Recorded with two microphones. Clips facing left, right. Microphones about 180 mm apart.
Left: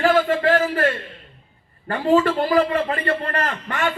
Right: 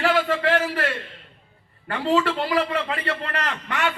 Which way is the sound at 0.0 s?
40° left (ahead or behind).